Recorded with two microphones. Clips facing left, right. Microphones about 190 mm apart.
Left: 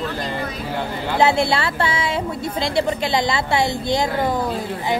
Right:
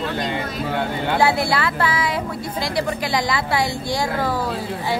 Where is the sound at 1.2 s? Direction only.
25° left (ahead or behind).